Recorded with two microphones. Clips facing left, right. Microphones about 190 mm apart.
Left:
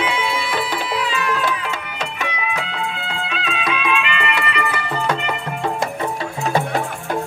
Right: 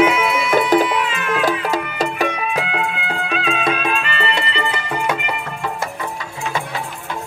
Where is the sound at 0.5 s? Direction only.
45° right (ahead or behind).